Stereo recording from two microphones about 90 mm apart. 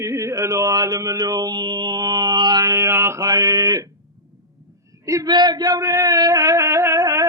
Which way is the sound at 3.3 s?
45° right (ahead or behind).